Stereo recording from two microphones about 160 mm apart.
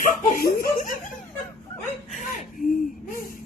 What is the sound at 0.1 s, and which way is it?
Laughter, 65° left (ahead or behind).